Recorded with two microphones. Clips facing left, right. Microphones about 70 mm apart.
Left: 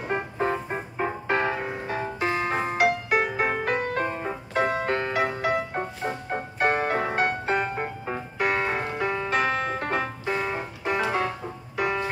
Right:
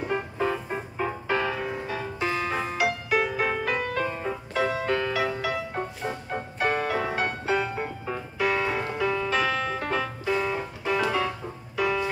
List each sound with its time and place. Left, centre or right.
0.1 s music: left
5.8 s music: left
6.6 s music: left